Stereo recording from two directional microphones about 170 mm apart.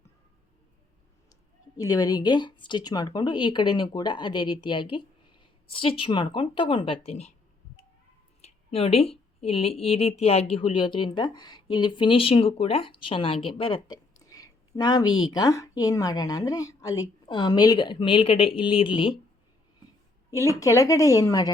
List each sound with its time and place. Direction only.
1.8 s speech: 20° left (ahead or behind); by 7.3 s 40° left (ahead or behind)
8.4 s speech: 40° left (ahead or behind)
20.6 s speech: 20° left (ahead or behind)